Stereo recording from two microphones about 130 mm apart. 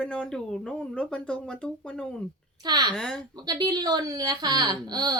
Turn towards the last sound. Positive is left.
turn(degrees=-30)  # may be behind; listen again after turning